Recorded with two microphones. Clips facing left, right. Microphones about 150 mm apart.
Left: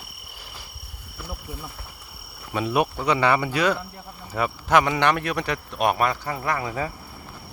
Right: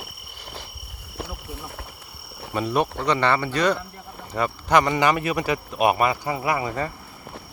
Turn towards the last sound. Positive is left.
turn(degrees=-10)  # may be behind; listen again after turning